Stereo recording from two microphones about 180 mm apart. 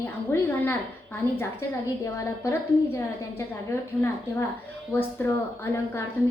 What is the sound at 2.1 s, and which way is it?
A woman's voice, 15° left (ahead or behind).